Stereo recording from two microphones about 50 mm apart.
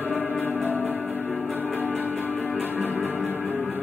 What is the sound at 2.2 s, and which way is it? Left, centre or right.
Music, right.